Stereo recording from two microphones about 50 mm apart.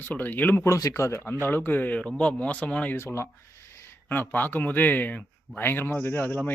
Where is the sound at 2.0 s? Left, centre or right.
Centre.